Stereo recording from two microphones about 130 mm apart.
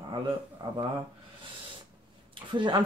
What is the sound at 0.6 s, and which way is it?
Speech, 35° right (ahead or behind).